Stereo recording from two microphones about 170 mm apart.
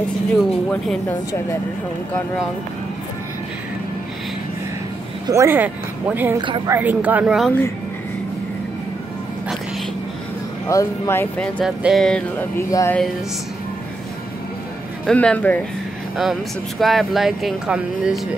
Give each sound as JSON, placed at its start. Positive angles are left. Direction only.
{"t": 0.4, "sound": "speech", "side_deg": 0}
{"t": 5.3, "sound": "speech", "side_deg": -15}
{"t": 6.3, "sound": "a woman's voice", "side_deg": -30}
{"t": 6.7, "sound": "speech", "side_deg": -10}
{"t": 10.7, "sound": "music", "side_deg": 15}
{"t": 15.0, "sound": "music", "side_deg": 5}
{"t": 16.2, "sound": "speech", "side_deg": 0}